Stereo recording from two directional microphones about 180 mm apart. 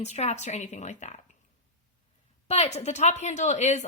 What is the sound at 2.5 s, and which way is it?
Speech, 35° left (ahead or behind).